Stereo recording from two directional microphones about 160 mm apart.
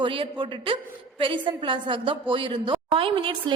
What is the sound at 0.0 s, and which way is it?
A woman's voice, 30° right (ahead or behind).